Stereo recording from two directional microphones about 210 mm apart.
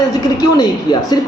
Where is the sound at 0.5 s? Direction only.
20° left (ahead or behind).